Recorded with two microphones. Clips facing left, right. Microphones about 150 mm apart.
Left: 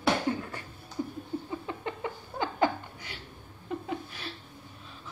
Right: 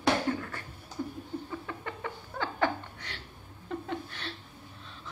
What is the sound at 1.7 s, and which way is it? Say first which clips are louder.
Laughter: left 3 dB; 20° left (ahead or behind).